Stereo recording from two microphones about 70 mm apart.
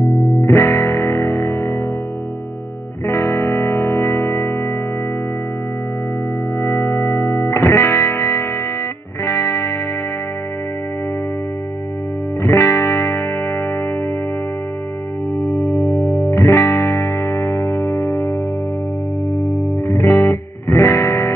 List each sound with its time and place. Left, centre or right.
0.0 s music: centre
0.5 s music: left
3.1 s music: left
4.3 s music: left
6.9 s music: left
7.4 s music: left
12.4 s music: left
15.6 s music: left
19.3 s music: left
20.0 s music: left